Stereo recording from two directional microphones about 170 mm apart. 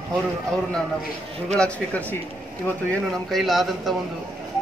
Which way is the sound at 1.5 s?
5° left (ahead or behind).